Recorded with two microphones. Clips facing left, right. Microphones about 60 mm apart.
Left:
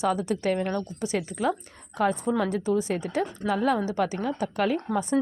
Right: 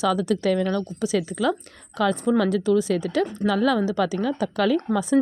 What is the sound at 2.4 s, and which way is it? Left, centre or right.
Speech, right.